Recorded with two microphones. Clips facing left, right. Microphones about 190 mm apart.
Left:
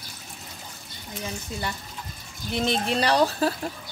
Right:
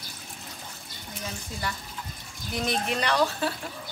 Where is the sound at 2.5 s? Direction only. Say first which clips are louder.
Left 3 dB; 30° left (ahead or behind).